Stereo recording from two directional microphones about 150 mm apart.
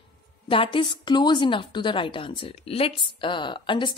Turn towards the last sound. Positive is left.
turn(degrees=35)  # may be behind; listen again after turning